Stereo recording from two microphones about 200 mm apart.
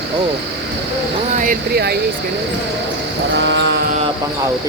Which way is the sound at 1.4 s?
50° right (ahead or behind).